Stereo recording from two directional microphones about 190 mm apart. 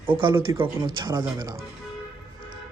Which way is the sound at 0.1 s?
25° right (ahead or behind).